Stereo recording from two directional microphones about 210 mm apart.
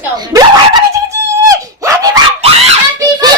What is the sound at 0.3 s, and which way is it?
Dog, 20° right (ahead or behind).